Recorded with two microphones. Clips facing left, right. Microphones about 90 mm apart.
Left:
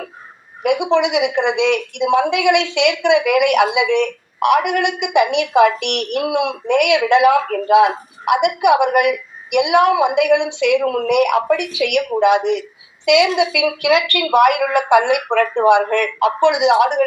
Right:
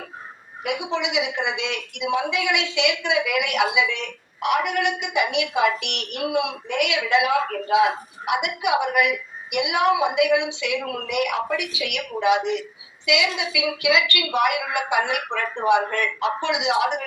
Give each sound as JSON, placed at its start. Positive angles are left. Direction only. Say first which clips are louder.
{"t": 0.6, "sound": "a woman's voice", "louder": "left 10 dB", "side_deg": 60}